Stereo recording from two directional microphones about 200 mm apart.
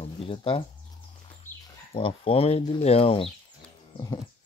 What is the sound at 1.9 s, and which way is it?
Moo, 25° left (ahead or behind).